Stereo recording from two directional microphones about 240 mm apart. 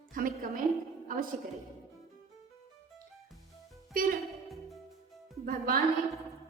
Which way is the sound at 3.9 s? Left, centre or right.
Right.